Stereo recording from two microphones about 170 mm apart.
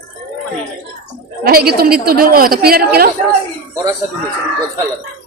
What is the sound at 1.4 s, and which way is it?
A woman's voice, 65° right (ahead or behind).